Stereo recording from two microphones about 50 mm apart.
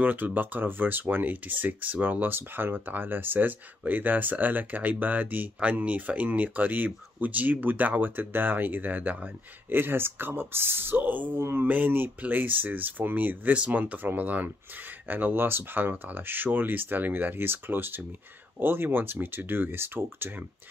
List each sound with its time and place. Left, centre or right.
0.0 s speech: right
9.7 s speech: right
11.0 s speech: right
11.3 s speech: right
11.6 s speech: right